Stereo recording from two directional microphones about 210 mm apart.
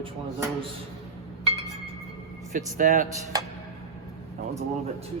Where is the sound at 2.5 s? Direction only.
40° right (ahead or behind).